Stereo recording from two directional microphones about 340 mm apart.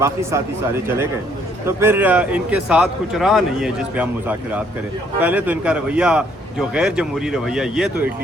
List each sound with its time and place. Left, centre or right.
0.0 s a man's voice: centre
1.6 s a man's voice: centre